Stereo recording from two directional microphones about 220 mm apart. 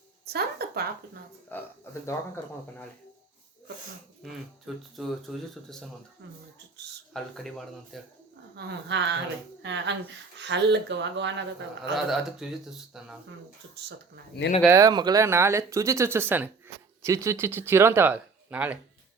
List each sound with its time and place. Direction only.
0.3 s speech: 45° right (ahead or behind)
1.5 s speech: 10° left (ahead or behind)
4.2 s speech: centre (ahead or behind)
7.1 s speech: centre (ahead or behind)
8.5 s speech: 55° right (ahead or behind)
11.9 s speech: centre (ahead or behind)
14.3 s speech: 50° left (ahead or behind)
14.7 s speech: 15° right (ahead or behind)